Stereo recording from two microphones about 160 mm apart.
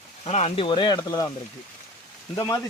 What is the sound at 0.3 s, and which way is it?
Speech, 40° left (ahead or behind).